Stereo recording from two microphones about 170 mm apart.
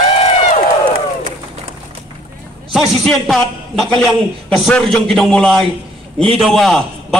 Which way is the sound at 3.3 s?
Centre (ahead or behind).